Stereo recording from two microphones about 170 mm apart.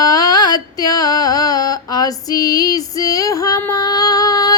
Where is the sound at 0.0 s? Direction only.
20° left (ahead or behind).